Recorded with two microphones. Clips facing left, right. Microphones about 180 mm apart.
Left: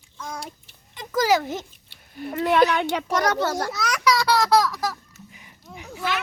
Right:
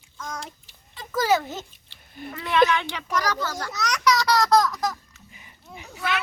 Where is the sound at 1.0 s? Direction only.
15° left (ahead or behind).